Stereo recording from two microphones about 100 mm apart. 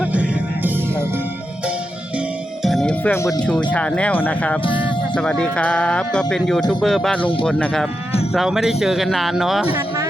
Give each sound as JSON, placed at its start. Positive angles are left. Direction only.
{"t": 0.0, "sound": "music", "side_deg": -15}
{"t": 2.6, "sound": "music", "side_deg": 0}
{"t": 2.9, "sound": "music", "side_deg": 15}
{"t": 3.7, "sound": "speech", "side_deg": 10}
{"t": 4.6, "sound": "speech", "side_deg": 55}
{"t": 5.1, "sound": "speech", "side_deg": 10}